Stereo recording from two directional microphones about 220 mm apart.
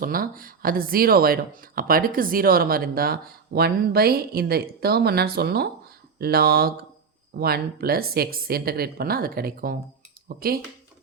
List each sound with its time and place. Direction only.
0.0 s speech: 40° right (ahead or behind)